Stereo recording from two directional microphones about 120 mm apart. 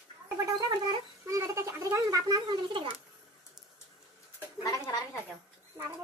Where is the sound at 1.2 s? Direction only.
25° right (ahead or behind); by 2.9 s 45° right (ahead or behind).